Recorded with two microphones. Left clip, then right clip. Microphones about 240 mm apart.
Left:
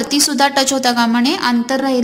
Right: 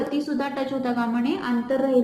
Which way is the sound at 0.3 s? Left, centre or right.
Left.